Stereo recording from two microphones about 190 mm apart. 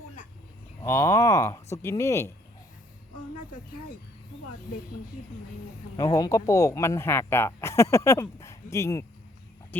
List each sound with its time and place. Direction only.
0.8 s speech: 15° left (ahead or behind)
6.1 s speech: 20° left (ahead or behind)